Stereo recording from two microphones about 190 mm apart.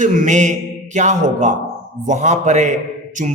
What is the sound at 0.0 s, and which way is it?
A man's voice, 40° right (ahead or behind).